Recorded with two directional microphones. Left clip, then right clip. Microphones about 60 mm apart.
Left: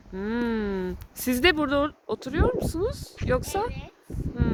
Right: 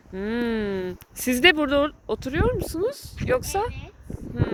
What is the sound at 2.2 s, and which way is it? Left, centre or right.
Speech, centre.